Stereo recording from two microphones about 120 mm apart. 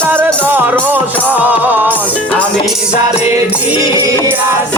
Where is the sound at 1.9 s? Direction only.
10° left (ahead or behind).